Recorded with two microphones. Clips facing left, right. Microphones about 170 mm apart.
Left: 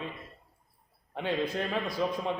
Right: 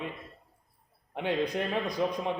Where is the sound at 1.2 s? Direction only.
15° right (ahead or behind).